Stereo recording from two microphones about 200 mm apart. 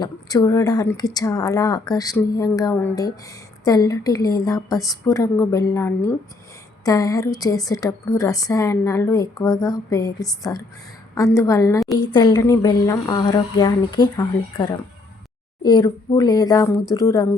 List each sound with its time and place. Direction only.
0.0 s speech: 20° left (ahead or behind)